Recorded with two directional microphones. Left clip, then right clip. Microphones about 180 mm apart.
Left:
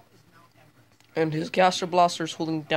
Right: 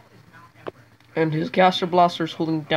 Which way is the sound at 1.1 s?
15° left (ahead or behind).